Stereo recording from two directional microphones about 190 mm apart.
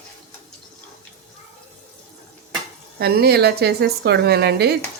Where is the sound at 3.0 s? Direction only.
55° right (ahead or behind).